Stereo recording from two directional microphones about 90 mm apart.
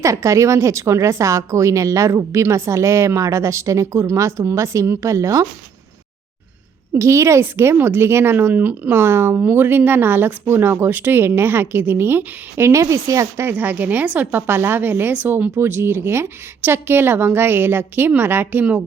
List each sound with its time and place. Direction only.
0.0 s a woman's voice: 35° right (ahead or behind)
6.9 s speech: 35° right (ahead or behind)